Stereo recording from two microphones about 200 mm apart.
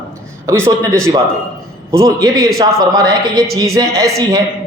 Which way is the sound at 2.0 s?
20° right (ahead or behind).